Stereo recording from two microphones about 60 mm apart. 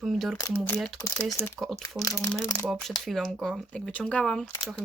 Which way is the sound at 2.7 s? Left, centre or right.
Centre.